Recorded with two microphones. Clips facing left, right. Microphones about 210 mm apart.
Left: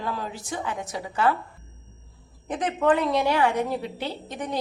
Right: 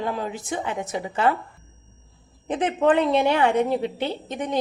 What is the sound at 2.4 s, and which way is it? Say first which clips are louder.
A woman's voice: right 2 dB; 25° right (ahead or behind).